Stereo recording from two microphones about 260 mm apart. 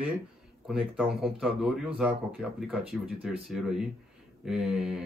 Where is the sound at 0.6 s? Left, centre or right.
Centre.